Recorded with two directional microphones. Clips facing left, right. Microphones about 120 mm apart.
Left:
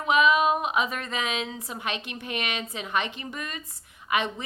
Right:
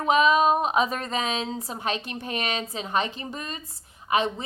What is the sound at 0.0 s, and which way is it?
Speech, 35° right (ahead or behind).